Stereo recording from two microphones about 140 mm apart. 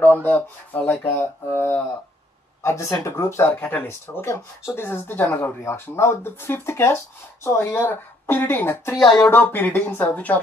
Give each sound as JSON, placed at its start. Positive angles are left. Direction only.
{"t": 0.0, "sound": "speech", "side_deg": 10}